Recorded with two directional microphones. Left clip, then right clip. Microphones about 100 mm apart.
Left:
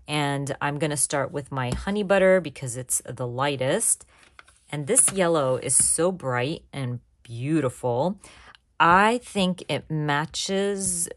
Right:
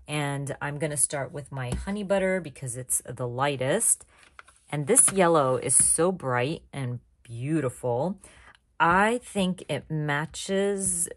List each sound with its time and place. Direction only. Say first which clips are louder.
0.0 s a sound: left 5 dB; 10° left (ahead or behind)
1.0 s speech: left 6 dB; 60° left (ahead or behind); by 2.4 s 80° left
2.6 s speech: left 4 dB; 30° left (ahead or behind)
3.1 s a woman's voice: left 1 dB; 10° left (ahead or behind)